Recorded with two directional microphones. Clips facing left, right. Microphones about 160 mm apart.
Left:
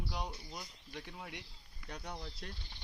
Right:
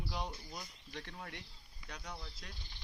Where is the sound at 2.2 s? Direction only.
40° left (ahead or behind).